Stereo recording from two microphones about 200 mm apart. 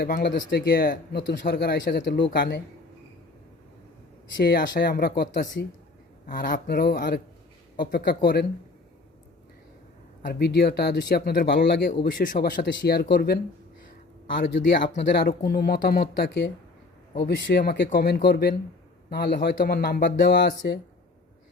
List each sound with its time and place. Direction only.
0.0 s speech: 50° left (ahead or behind)
4.4 s speech: 45° left (ahead or behind)
10.2 s speech: 50° left (ahead or behind)
12.0 s speech: 40° left (ahead or behind)
14.5 s speech: 60° left (ahead or behind)